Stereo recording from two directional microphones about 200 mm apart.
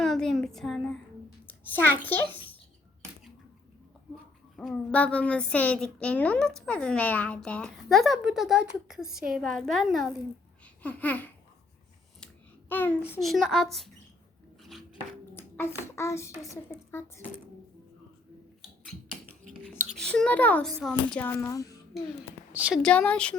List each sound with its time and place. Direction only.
0.0 s a sound: centre (ahead or behind)
1.7 s a child's voice: 10° left (ahead or behind)
4.5 s a child's voice: 5° left (ahead or behind)
12.2 s a sound: 10° left (ahead or behind)
13.1 s a child's voice: centre (ahead or behind)
15.4 s a child's voice: 10° left (ahead or behind)
19.9 s a child's voice: 5° left (ahead or behind)
22.5 s a woman's voice: 5° right (ahead or behind)
22.8 s a child's voice: 5° left (ahead or behind)